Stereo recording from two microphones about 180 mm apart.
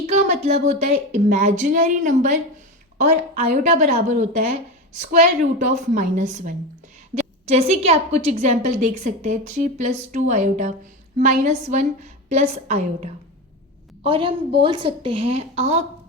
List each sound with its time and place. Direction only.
0.1 s a woman's voice: 40° right (ahead or behind)
14.1 s a woman's voice: 30° right (ahead or behind)